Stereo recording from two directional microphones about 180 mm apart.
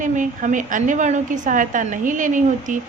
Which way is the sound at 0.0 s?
45° right (ahead or behind).